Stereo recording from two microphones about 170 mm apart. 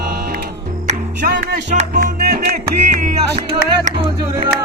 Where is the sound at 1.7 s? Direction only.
55° right (ahead or behind).